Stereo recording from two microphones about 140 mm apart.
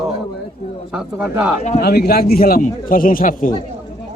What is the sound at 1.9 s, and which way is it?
A man's voice, 90° left.